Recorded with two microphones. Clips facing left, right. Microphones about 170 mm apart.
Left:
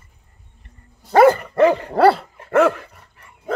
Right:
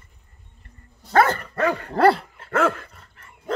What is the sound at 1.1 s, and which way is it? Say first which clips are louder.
Dog: left 7 dB; 15° left (ahead or behind).